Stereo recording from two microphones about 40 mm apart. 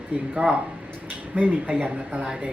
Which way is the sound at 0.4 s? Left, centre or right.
Right.